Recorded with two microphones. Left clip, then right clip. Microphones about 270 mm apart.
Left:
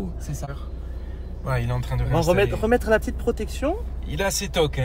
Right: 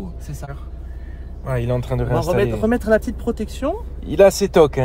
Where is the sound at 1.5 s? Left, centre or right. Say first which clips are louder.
Right 7 dB; centre.